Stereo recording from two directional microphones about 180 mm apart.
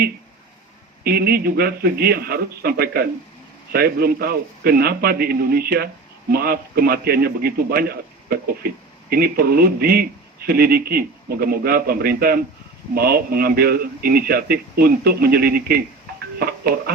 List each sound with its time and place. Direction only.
1.0 s a man's voice: 60° right (ahead or behind)